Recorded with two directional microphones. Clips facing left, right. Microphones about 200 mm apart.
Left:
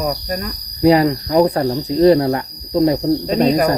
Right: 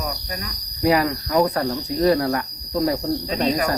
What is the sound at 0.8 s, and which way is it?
Speech, 25° left (ahead or behind).